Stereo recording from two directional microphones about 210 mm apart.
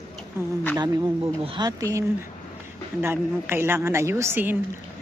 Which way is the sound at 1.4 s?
20° right (ahead or behind).